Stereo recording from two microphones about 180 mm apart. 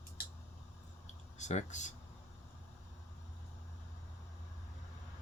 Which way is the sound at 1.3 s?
40° left (ahead or behind).